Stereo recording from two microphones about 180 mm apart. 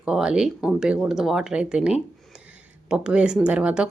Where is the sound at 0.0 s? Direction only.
5° right (ahead or behind).